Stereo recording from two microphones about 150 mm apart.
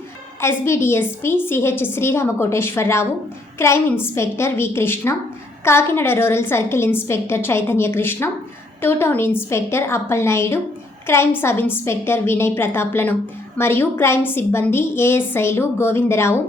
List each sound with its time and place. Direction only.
0.4 s a woman's voice: 15° left (ahead or behind)